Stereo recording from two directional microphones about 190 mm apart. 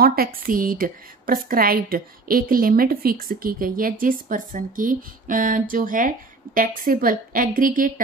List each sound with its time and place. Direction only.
0.0 s a woman's voice: 50° right (ahead or behind)